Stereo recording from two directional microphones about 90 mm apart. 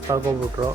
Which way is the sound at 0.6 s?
50° right (ahead or behind).